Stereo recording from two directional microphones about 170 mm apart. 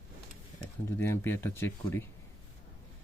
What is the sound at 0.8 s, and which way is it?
Speech, 15° left (ahead or behind).